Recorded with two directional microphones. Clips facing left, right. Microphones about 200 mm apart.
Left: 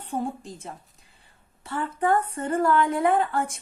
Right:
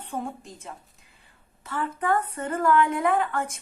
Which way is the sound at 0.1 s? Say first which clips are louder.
Left 4 dB; 35° left (ahead or behind).